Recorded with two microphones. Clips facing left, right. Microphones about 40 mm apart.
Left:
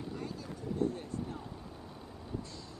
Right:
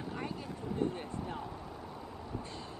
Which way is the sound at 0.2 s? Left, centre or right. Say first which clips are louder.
Right 2 dB; right.